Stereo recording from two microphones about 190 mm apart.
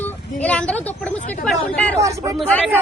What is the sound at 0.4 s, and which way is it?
Speech, 5° left (ahead or behind).